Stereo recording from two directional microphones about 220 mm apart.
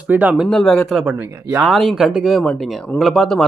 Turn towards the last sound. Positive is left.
turn(degrees=0)  # may be behind; listen again after turning